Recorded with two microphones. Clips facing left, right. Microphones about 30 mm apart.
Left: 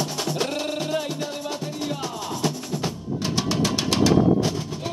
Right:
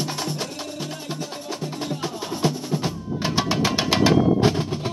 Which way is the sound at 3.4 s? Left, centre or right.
Centre.